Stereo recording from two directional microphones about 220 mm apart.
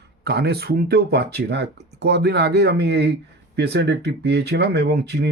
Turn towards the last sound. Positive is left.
turn(degrees=-45)  # may be behind; listen again after turning